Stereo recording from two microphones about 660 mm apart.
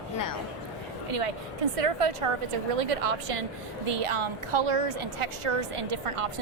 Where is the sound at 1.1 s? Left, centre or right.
Right.